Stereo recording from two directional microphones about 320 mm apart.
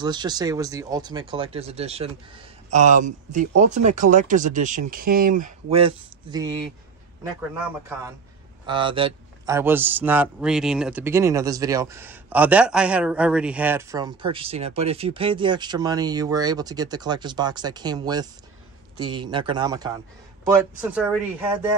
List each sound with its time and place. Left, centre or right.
0.0 s a man's voice: centre
8.6 s a man's voice: centre